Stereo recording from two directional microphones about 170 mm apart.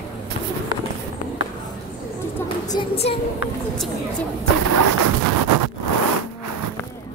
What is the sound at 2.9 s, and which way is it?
Speech, 35° left (ahead or behind).